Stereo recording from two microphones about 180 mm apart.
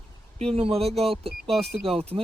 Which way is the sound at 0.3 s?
35° right (ahead or behind).